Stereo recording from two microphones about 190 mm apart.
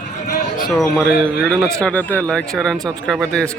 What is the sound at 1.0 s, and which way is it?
Speech, 5° left (ahead or behind).